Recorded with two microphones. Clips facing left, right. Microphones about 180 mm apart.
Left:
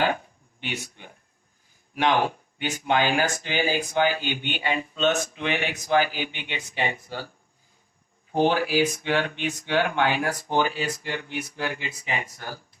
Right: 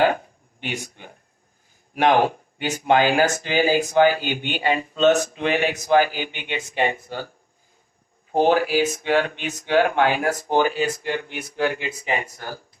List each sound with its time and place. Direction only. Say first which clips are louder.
0.6 s speech: right 3 dB; 45° right (ahead or behind)
8.3 s speech: right 4 dB; 40° right (ahead or behind)